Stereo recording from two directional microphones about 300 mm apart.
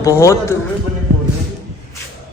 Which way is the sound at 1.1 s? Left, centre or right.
Right.